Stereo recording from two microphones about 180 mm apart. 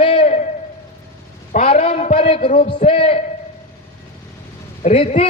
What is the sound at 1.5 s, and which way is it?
A man's voice, 35° left (ahead or behind).